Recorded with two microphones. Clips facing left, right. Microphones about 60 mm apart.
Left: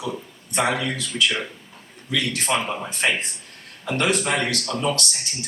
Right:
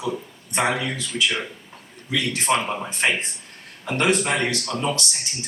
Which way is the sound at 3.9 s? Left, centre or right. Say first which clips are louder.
Right 1 dB; right.